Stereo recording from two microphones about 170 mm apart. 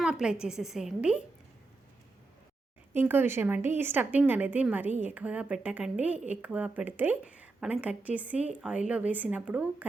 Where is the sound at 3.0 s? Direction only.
10° right (ahead or behind).